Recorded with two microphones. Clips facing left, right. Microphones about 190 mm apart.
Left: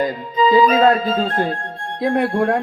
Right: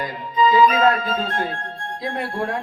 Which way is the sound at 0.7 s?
30° left (ahead or behind).